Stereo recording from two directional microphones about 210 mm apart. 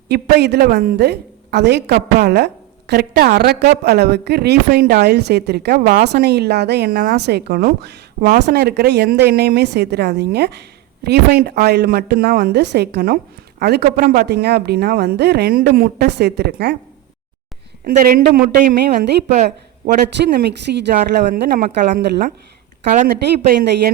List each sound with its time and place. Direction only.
0.1 s a woman's voice: 50° right (ahead or behind)
17.8 s a woman's voice: 45° right (ahead or behind)
20.3 s speech: 55° right (ahead or behind)
20.9 s a woman's voice: 35° right (ahead or behind)